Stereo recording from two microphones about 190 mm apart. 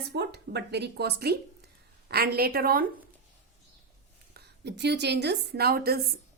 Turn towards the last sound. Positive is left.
turn(degrees=-55)  # may be behind; listen again after turning